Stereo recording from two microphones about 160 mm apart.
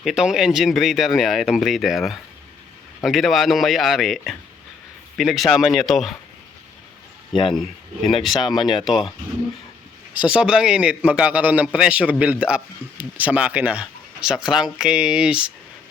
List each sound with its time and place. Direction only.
0.0 s speech: 5° right (ahead or behind)
7.5 s speech: centre (ahead or behind)
8.4 s speech: 25° left (ahead or behind)
8.8 s speech: centre (ahead or behind)
10.2 s a man's voice: 5° right (ahead or behind)